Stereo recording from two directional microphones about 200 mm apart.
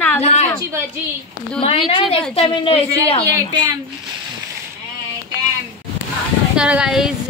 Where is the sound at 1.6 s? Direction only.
30° left (ahead or behind).